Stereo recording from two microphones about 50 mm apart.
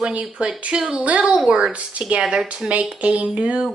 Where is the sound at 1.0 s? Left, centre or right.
Right.